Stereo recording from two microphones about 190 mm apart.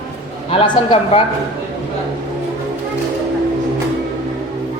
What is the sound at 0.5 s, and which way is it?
Speech, 30° left (ahead or behind).